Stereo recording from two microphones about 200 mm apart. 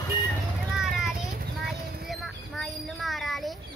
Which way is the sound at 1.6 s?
Centre (ahead or behind).